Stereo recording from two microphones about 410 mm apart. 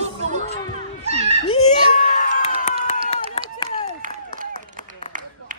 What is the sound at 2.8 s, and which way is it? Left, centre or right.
Run, centre.